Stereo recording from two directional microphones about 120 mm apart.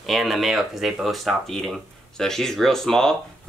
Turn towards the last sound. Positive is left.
turn(degrees=5)  # may be behind; listen again after turning